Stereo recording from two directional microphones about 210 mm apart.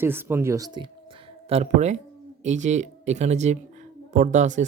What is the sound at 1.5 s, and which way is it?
Speech, 30° right (ahead or behind).